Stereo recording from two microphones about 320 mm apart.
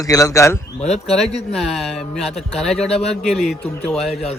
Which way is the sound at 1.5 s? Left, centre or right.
Centre.